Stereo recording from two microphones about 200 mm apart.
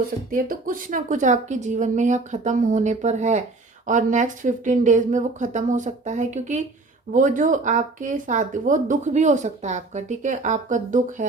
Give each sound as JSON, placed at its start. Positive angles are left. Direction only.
{"t": 0.3, "sound": "speech", "side_deg": -45}